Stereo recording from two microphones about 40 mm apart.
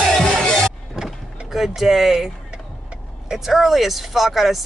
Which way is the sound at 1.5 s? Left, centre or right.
Centre.